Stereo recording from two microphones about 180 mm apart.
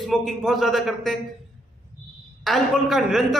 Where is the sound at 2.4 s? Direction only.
Centre (ahead or behind).